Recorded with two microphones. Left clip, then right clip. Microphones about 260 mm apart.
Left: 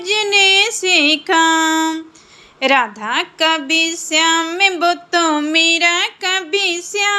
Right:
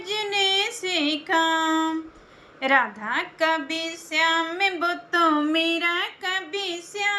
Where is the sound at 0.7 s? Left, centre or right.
Centre.